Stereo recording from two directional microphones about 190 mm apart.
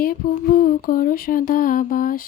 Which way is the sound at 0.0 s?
50° left (ahead or behind).